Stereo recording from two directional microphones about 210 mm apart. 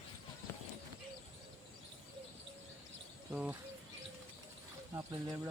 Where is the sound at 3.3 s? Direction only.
5° right (ahead or behind).